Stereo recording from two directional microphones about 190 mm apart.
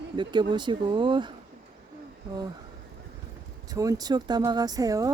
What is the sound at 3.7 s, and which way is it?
Speech, 20° right (ahead or behind).